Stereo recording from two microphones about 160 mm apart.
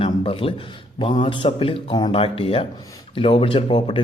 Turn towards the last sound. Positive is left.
turn(degrees=30)  # may be behind; listen again after turning